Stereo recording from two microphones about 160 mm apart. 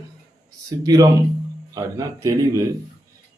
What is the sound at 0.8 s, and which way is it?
A man's voice, 20° right (ahead or behind).